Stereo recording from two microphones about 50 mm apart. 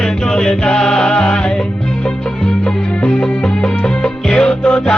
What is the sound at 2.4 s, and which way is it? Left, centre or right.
Music, left.